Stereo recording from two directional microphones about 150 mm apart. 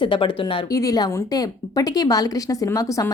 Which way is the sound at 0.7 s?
25° left (ahead or behind).